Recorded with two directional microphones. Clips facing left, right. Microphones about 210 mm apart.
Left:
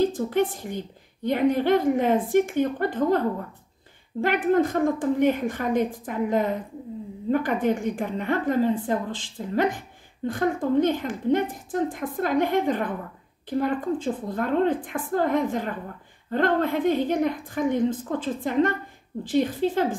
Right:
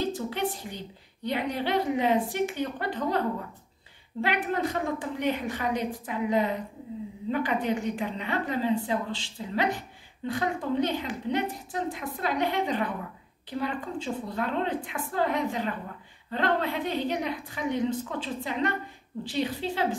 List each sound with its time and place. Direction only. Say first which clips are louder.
0.0 s a woman's voice: left 7 dB; 50° left (ahead or behind)